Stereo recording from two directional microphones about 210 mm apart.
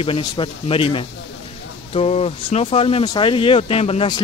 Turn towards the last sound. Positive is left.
turn(degrees=25)  # may be behind; listen again after turning